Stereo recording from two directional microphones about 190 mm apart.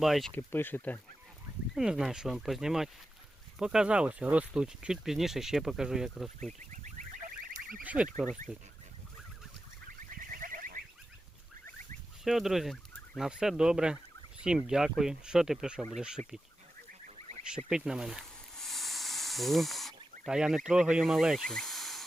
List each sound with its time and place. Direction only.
0.0 s speech: centre (ahead or behind)
1.7 s speech: 5° right (ahead or behind)
6.6 s goose: 40° right (ahead or behind)
10.0 s fowl: 45° right (ahead or behind)
12.2 s fowl: centre (ahead or behind)
16.0 s speech: 5° right (ahead or behind)
17.7 s snake: 5° right (ahead or behind)
20.2 s speech: 5° right (ahead or behind)